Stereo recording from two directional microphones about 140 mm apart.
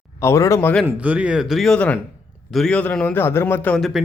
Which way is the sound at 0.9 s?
10° right (ahead or behind).